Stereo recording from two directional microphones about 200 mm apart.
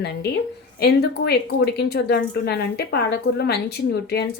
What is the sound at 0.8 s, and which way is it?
A woman's voice, 55° left (ahead or behind).